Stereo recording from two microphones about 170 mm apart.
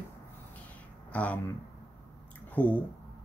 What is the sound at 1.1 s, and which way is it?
Speech, 10° left (ahead or behind).